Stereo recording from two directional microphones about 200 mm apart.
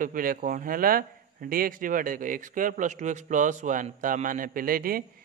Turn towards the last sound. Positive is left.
turn(degrees=-45)  # may be behind; listen again after turning